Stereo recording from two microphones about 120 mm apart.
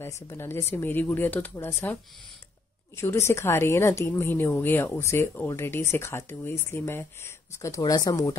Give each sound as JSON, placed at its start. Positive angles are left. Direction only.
{"t": 0.0, "sound": "speech", "side_deg": 20}
{"t": 3.0, "sound": "a woman's voice", "side_deg": 20}
{"t": 7.8, "sound": "speech", "side_deg": 35}